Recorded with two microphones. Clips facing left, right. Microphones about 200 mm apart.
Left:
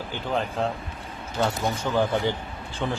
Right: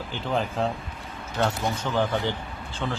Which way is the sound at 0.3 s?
Centre (ahead or behind).